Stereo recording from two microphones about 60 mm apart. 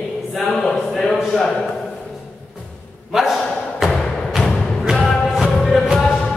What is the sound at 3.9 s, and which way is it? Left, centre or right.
Music, centre.